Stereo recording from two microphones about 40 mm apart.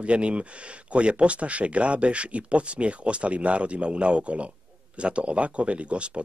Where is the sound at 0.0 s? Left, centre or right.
Right.